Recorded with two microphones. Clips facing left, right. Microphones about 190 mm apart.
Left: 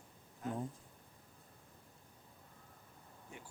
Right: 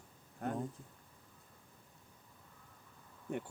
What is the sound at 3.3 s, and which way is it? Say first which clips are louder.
Speech: right 15 dB; 60° right (ahead or behind).